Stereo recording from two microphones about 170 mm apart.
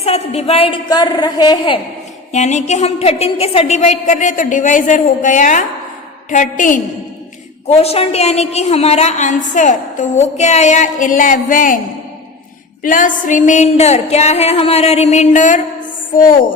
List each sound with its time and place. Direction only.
0.0 s a woman's voice: 40° left (ahead or behind)
2.3 s a woman's voice: 45° left (ahead or behind)
7.8 s a woman's voice: 35° left (ahead or behind); by 11.8 s 50° left (ahead or behind)
12.8 s a sound: 50° left (ahead or behind)
16.1 s a woman's voice: 50° left (ahead or behind)